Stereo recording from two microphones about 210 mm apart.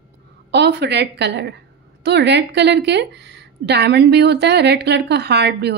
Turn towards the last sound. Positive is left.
turn(degrees=-50)  # may be behind; listen again after turning